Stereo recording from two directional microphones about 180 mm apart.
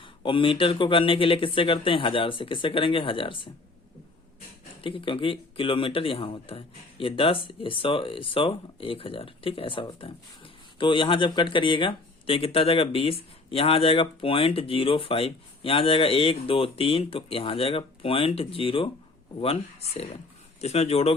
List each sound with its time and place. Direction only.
0.0 s a man's voice: 30° left (ahead or behind)
4.8 s a man's voice: 30° left (ahead or behind)